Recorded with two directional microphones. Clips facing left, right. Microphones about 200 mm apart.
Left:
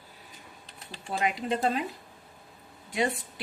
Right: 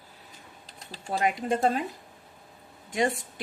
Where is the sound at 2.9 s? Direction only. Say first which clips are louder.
Right 2 dB; 45° right (ahead or behind).